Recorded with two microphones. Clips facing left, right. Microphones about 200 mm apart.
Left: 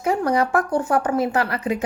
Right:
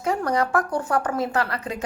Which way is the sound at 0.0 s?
25° left (ahead or behind).